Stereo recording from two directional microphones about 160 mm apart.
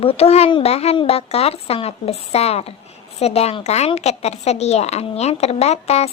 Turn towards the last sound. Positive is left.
turn(degrees=40)  # may be behind; listen again after turning